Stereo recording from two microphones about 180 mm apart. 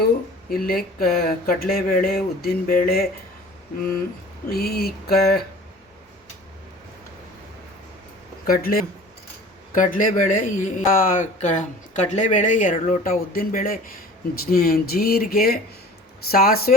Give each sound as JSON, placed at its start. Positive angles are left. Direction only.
{"t": 0.5, "sound": "speech", "side_deg": 55}
{"t": 4.4, "sound": "speech", "side_deg": 60}
{"t": 8.4, "sound": "speech", "side_deg": 55}